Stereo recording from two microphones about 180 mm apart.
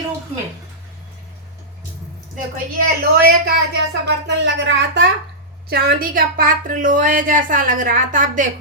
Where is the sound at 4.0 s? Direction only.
85° right.